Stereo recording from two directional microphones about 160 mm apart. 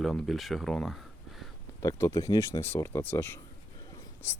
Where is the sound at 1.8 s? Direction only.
20° left (ahead or behind).